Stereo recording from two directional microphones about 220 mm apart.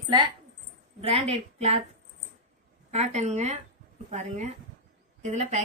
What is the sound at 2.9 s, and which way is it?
A woman's voice, 30° right (ahead or behind).